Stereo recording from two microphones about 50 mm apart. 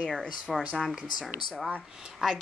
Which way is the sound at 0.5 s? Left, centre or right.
Centre.